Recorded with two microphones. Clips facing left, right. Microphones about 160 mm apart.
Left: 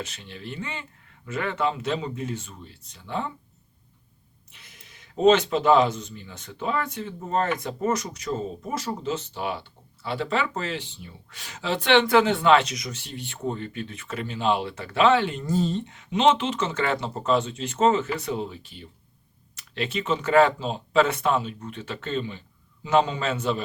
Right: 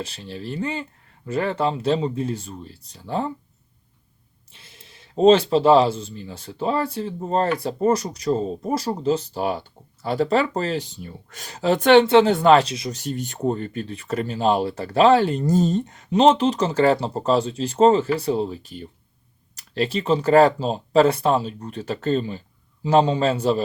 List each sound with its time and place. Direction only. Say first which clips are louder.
0.0 s speech: right 5 dB; 35° right (ahead or behind)
4.5 s speech: right 3 dB; 30° right (ahead or behind); by 12.0 s 45° right (ahead or behind)
12.0 s speech: right 5 dB; 25° right (ahead or behind)
12.3 s speech: right 4 dB; 40° right (ahead or behind)
13.0 s speech: right 8 dB; 45° right (ahead or behind)